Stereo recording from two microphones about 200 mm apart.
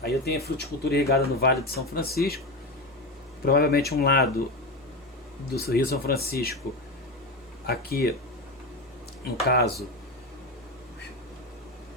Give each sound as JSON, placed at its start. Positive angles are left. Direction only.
{"t": 0.0, "sound": "speech", "side_deg": 55}
{"t": 3.4, "sound": "speech", "side_deg": 50}
{"t": 5.5, "sound": "speech", "side_deg": 50}
{"t": 7.7, "sound": "speech", "side_deg": 50}
{"t": 9.5, "sound": "speech", "side_deg": 50}